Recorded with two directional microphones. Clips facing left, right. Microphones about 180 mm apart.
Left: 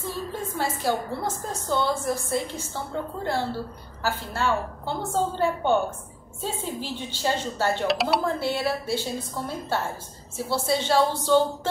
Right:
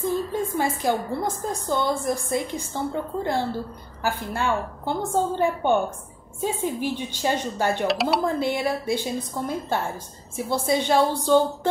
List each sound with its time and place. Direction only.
0.0 s a woman's voice: 20° right (ahead or behind)
7.8 s speech: centre (ahead or behind)
8.4 s a woman's voice: 15° right (ahead or behind)